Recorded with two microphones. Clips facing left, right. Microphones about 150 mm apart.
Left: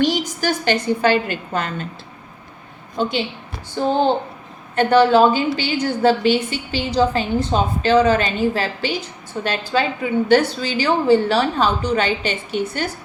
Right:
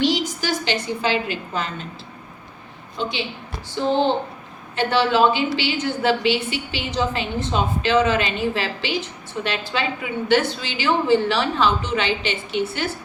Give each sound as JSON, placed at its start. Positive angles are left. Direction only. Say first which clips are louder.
{"t": 0.0, "sound": "a woman's voice", "louder": "left 2 dB", "side_deg": 50}
{"t": 3.0, "sound": "a woman's voice", "louder": "left 5 dB", "side_deg": 45}
{"t": 4.7, "sound": "a woman's voice", "louder": "left 6 dB", "side_deg": 45}